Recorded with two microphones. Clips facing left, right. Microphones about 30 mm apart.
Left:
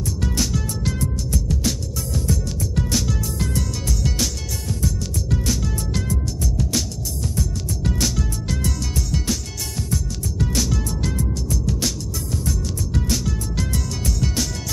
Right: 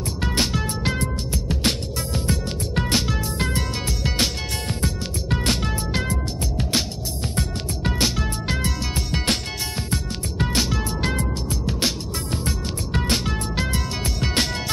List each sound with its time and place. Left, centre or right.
0.2 s music: right
10.4 s music: right